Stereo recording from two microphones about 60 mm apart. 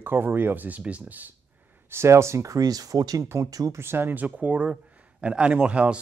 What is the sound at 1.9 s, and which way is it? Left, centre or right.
Speech, right.